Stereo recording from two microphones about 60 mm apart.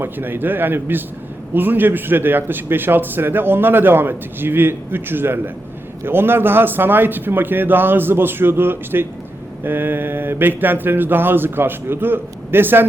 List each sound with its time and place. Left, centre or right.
0.0 s a man's voice: right